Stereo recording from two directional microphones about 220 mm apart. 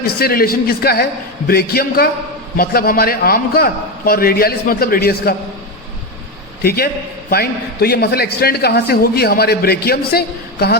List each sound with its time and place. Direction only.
0.2 s a man's voice: 45° left (ahead or behind)
6.6 s a man's voice: 45° left (ahead or behind)